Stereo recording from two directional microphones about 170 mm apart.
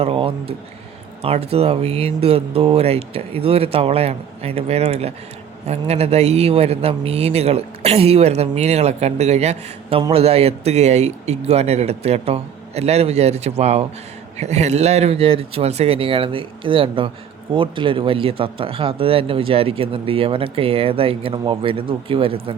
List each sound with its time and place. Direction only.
0.0 s speech: 30° right (ahead or behind)